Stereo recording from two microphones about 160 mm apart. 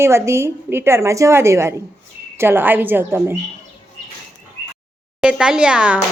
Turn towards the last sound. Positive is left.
turn(degrees=-5)  # may be behind; listen again after turning